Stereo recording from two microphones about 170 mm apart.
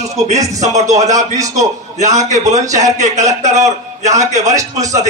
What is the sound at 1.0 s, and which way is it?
Speech, 20° right (ahead or behind).